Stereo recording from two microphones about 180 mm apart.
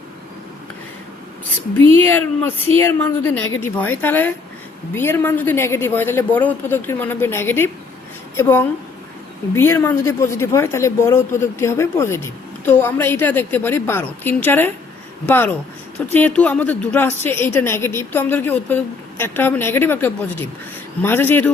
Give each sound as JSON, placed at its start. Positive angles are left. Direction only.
{"t": 2.0, "sound": "speech", "side_deg": 10}